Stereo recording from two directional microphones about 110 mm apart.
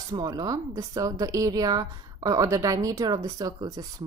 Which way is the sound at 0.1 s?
40° right (ahead or behind).